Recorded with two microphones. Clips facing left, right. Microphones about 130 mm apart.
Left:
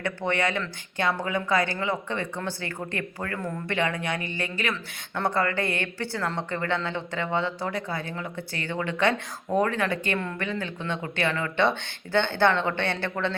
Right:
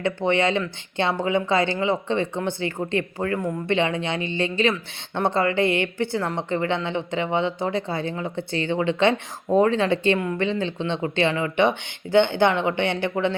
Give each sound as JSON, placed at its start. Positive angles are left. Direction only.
{"t": 0.0, "sound": "speech", "side_deg": -20}